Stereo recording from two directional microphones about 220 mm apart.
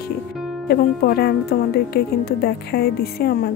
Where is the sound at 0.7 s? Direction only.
45° left (ahead or behind).